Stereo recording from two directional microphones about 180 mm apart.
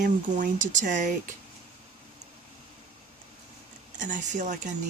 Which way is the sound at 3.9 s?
45° right (ahead or behind).